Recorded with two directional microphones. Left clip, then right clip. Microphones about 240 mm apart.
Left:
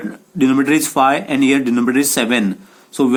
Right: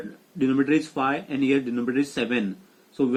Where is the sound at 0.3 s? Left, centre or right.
Left.